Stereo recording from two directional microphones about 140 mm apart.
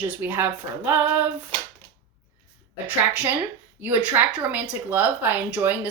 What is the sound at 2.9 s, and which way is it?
Speech, 10° right (ahead or behind).